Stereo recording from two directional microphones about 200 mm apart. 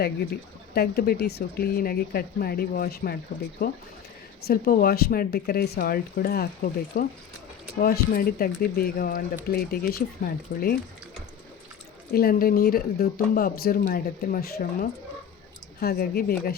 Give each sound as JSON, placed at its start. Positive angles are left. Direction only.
{"t": 0.7, "sound": "speech", "side_deg": 50}
{"t": 4.4, "sound": "speech", "side_deg": 50}
{"t": 12.1, "sound": "speech", "side_deg": 45}